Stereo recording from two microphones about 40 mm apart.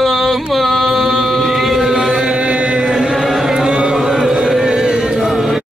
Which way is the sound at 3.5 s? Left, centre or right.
Centre.